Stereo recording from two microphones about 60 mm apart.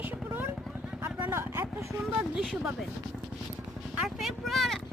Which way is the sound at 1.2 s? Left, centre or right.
Right.